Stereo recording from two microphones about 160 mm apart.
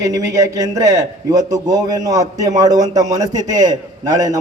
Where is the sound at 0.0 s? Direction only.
20° right (ahead or behind).